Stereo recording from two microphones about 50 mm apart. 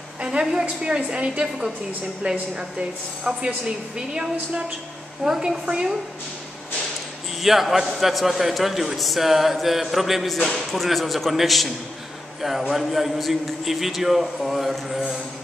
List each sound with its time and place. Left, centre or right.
0.2 s a woman's voice: centre
3.3 s a woman's voice: centre
7.4 s a man's voice: centre